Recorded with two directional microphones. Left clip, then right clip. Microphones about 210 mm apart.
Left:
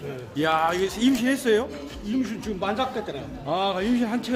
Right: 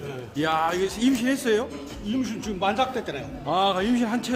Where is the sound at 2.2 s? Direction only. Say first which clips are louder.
Right 1 dB; 20° right (ahead or behind).